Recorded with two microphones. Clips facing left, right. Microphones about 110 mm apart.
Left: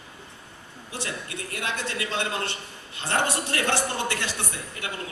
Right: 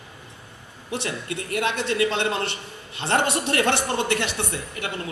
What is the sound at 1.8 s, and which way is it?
Speech, 65° right (ahead or behind).